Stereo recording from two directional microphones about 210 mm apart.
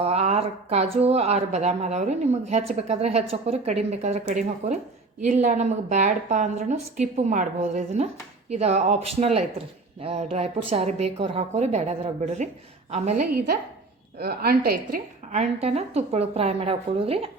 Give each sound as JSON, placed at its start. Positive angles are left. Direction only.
{"t": 0.0, "sound": "speech", "side_deg": -30}
{"t": 13.3, "sound": "a woman's voice", "side_deg": -45}
{"t": 15.3, "sound": "speech", "side_deg": -30}